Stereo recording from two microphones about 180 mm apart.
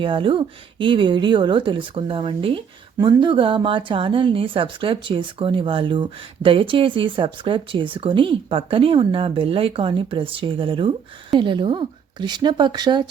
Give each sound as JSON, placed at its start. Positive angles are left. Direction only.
{"t": 0.0, "sound": "speech", "side_deg": -30}